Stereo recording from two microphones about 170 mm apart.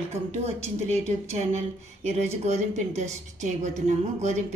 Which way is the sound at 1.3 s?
40° right (ahead or behind).